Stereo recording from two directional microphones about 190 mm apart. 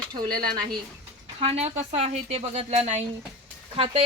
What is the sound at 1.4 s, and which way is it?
Speech, 35° right (ahead or behind).